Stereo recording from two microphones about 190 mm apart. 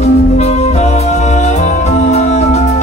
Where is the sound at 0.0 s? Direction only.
35° left (ahead or behind).